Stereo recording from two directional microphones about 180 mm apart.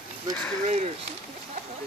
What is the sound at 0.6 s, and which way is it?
Speech, 35° right (ahead or behind).